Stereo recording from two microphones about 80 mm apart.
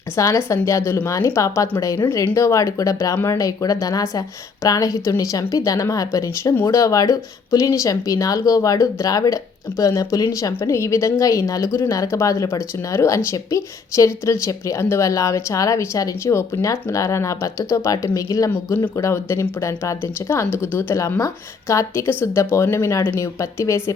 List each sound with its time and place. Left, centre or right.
0.2 s a woman's voice: left
10.6 s a woman's voice: left
19.1 s a woman's voice: left